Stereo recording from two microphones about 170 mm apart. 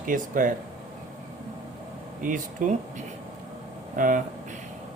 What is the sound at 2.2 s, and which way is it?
Speech, 50° right (ahead or behind).